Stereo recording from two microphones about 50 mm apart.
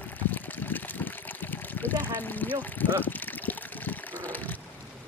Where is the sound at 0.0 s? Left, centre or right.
Left.